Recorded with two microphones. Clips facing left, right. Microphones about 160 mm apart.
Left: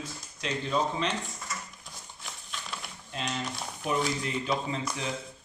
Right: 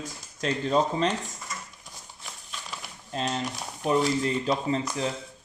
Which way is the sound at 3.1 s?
40° right (ahead or behind).